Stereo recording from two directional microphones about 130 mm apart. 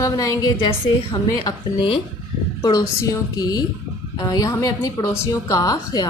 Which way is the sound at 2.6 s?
30° left (ahead or behind).